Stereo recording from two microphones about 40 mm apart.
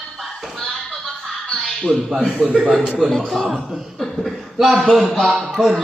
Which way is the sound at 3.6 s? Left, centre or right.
Centre.